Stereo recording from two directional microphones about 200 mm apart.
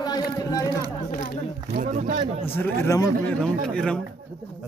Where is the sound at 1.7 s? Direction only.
40° right (ahead or behind).